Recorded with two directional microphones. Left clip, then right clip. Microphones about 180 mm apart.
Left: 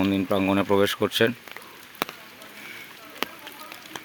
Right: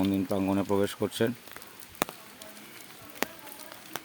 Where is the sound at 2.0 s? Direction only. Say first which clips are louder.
Left 2 dB; 50° right (ahead or behind).